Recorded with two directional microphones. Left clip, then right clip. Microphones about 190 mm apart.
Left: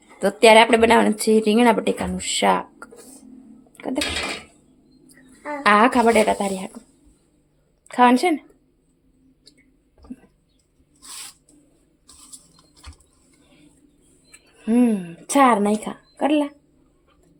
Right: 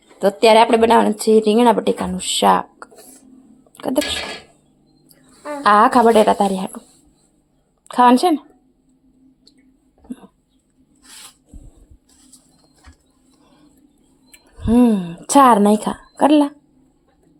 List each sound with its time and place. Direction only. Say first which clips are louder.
0.2 s speech: right 1 dB; 5° right (ahead or behind)
3.8 s a sound: right 6 dB; 10° right (ahead or behind)
5.6 s speech: right 4 dB; 10° right (ahead or behind)
7.9 s speech: right 4 dB; 10° right (ahead or behind)
14.6 s speech: right 5 dB; 10° right (ahead or behind)